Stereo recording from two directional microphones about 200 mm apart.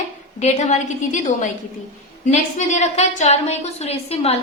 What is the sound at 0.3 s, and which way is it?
A woman's voice, 35° left (ahead or behind).